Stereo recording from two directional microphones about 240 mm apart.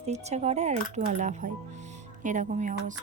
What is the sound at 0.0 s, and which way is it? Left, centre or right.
Speech, right.